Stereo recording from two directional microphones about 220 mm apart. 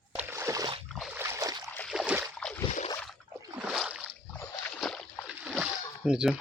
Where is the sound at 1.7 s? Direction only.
Centre (ahead or behind).